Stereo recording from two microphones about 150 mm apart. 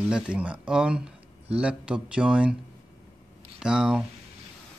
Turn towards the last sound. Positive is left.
turn(degrees=-5)  # may be behind; listen again after turning